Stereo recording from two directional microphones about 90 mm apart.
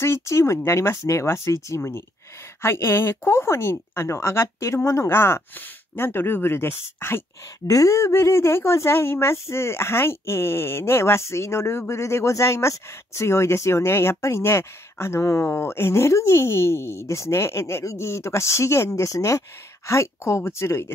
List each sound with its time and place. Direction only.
0.0 s speech: 30° left (ahead or behind)
7.6 s speech: 40° left (ahead or behind)